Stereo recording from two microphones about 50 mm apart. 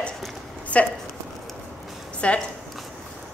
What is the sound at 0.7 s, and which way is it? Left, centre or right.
Speech, left.